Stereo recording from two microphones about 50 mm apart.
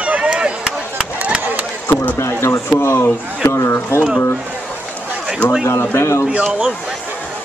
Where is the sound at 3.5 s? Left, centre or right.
Left.